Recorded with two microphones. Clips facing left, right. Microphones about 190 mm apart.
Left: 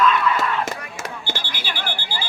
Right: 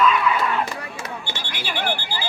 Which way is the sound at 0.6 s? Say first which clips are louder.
Left 1 dB; 45° left (ahead or behind).